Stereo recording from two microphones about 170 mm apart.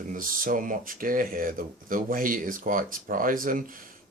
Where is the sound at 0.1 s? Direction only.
55° right (ahead or behind).